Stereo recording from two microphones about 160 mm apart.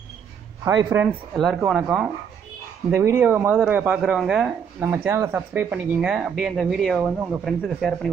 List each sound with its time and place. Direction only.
0.7 s speech: 20° right (ahead or behind)
1.0 s speech: centre (ahead or behind)
2.9 s speech: 15° right (ahead or behind); by 8.1 s centre (ahead or behind)